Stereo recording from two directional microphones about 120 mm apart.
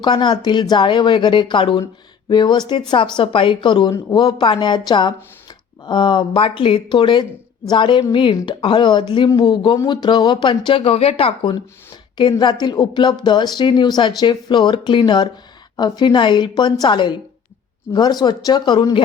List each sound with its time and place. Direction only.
0.0 s speech: 40° left (ahead or behind); by 11.5 s 55° left (ahead or behind)
12.4 s speech: 40° left (ahead or behind)